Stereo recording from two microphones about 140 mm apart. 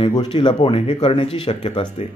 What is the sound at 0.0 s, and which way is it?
Speech, 35° left (ahead or behind).